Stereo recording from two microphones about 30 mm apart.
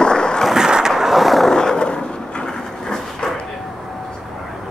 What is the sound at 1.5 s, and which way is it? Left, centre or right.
Vehicle, left.